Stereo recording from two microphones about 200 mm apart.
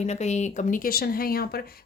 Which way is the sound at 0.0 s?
35° left (ahead or behind).